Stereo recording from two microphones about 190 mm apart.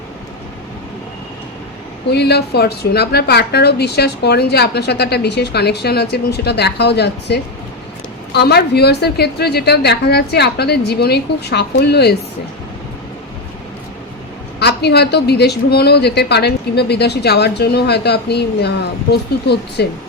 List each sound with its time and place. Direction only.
2.0 s a woman's voice: 60° left (ahead or behind)
14.6 s a woman's voice: 60° left (ahead or behind)